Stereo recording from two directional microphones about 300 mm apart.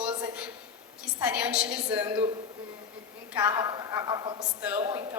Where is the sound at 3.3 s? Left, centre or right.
Centre.